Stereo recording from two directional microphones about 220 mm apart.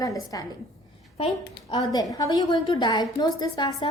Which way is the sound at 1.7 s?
15° left (ahead or behind).